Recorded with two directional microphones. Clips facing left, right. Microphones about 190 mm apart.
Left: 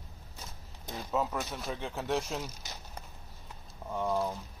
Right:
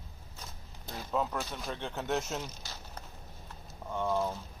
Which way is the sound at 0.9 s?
5° left (ahead or behind).